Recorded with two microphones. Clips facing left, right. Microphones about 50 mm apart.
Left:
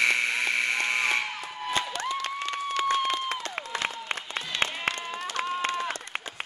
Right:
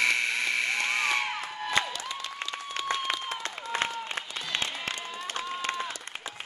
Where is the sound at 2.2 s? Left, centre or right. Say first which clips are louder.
Left 6 dB; left.